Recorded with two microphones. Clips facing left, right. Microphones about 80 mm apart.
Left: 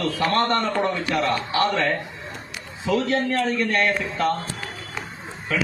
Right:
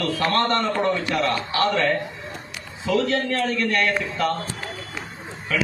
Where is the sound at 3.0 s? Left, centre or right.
Left.